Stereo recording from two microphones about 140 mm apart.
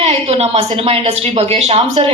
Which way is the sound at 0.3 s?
45° right (ahead or behind).